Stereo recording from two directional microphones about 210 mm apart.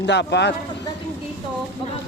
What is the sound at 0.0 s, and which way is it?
Speech, 55° left (ahead or behind).